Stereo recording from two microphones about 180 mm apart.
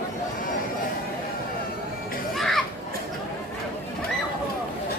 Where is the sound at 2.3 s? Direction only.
Centre (ahead or behind).